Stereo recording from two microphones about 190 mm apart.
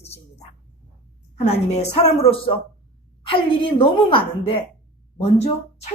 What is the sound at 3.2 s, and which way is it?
A woman's voice, 25° left (ahead or behind).